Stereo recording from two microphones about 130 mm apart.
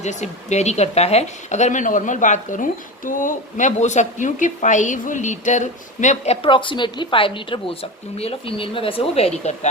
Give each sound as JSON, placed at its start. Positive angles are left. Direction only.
{"t": 0.0, "sound": "speech", "side_deg": 60}